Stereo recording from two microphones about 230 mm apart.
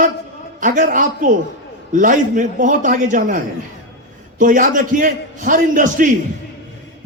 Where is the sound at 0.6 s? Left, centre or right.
Right.